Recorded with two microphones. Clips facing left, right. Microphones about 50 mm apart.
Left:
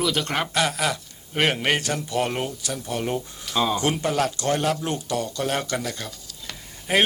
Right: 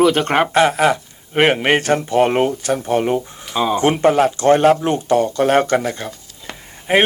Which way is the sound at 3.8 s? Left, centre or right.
Right.